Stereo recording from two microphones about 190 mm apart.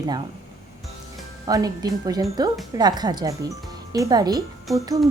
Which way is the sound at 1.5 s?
20° right (ahead or behind).